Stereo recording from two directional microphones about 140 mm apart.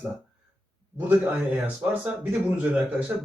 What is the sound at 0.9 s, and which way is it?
Speech, 10° right (ahead or behind).